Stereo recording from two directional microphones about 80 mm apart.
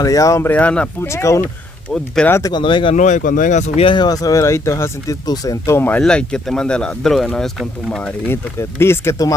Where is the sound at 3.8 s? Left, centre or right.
Left.